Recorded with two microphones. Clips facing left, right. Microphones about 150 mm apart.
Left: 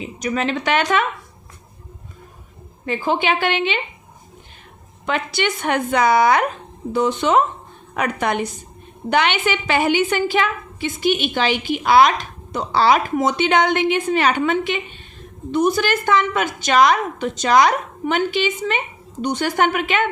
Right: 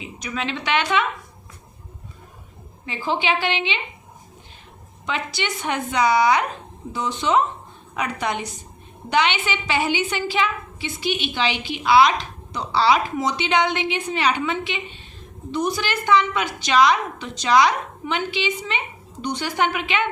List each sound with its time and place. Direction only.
0.0 s a woman's voice: 45° left (ahead or behind)
2.8 s a woman's voice: 50° left (ahead or behind)
5.0 s a woman's voice: 55° left (ahead or behind)